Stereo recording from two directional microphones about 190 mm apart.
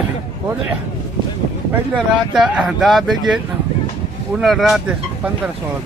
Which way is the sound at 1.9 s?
Centre (ahead or behind).